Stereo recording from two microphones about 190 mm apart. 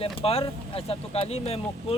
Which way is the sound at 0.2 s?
30° left (ahead or behind).